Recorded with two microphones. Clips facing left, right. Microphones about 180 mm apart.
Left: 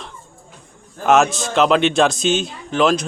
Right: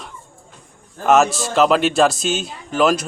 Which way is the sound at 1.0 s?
Centre (ahead or behind).